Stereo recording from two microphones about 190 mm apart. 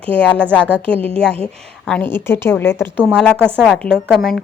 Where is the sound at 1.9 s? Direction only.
10° left (ahead or behind).